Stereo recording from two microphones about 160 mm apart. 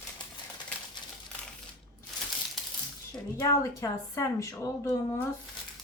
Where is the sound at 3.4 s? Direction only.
20° left (ahead or behind).